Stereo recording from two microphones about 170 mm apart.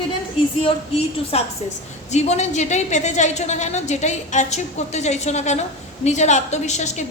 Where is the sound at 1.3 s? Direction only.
35° left (ahead or behind).